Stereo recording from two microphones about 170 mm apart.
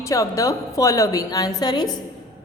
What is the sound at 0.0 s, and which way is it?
A woman's voice, 20° left (ahead or behind).